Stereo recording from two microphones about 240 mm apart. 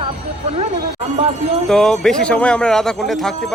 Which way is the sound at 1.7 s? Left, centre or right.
Centre.